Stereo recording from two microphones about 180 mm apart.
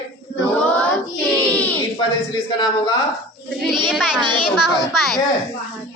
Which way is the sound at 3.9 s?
5° right (ahead or behind).